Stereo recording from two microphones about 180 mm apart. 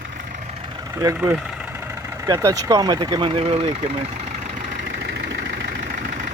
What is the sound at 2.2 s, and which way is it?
Speech, 20° right (ahead or behind).